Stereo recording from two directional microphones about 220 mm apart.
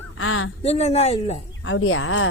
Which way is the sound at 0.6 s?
30° left (ahead or behind).